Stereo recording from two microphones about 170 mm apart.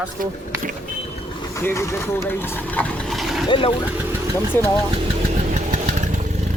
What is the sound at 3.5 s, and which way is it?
Speech, 30° left (ahead or behind).